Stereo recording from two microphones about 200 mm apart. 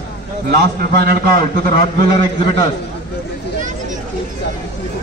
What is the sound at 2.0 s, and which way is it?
Speech, 25° left (ahead or behind).